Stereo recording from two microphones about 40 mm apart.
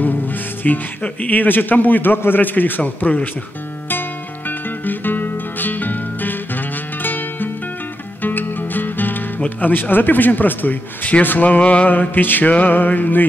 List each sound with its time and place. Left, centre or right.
0.7 s a man's voice: left
4.5 s music: left
9.6 s a man's voice: left
11.6 s music: left
11.9 s a man's voice: left